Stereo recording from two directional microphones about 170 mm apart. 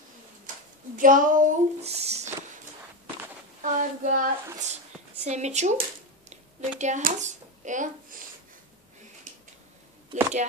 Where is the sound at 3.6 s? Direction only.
50° right (ahead or behind).